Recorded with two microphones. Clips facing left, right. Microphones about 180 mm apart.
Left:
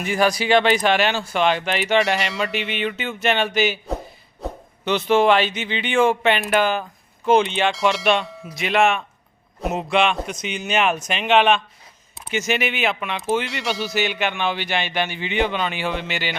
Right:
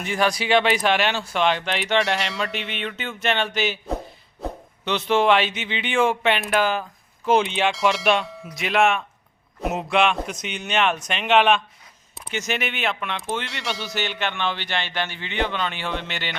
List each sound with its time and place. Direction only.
0.0 s speech: 5° left (ahead or behind)